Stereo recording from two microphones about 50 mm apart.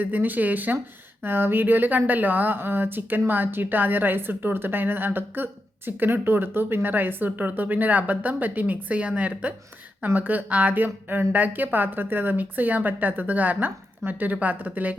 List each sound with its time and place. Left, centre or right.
0.0 s speech: right
1.2 s a woman's voice: right